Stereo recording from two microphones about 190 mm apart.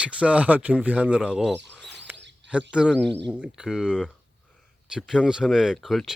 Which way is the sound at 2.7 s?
5° right (ahead or behind).